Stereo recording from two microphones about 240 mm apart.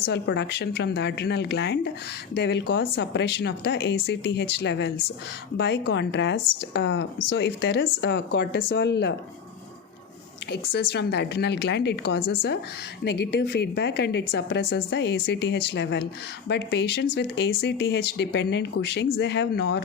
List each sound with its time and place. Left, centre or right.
0.1 s a woman's voice: left
10.7 s a woman's voice: left